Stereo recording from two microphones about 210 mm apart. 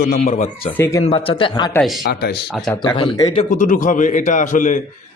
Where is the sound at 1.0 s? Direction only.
25° left (ahead or behind).